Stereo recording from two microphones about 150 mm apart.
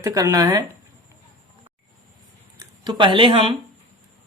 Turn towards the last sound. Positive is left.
turn(degrees=-35)  # may be behind; listen again after turning